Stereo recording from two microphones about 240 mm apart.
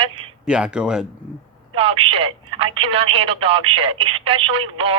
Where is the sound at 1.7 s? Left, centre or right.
Right.